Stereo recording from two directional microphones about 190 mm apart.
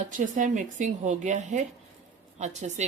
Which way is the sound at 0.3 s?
40° right (ahead or behind).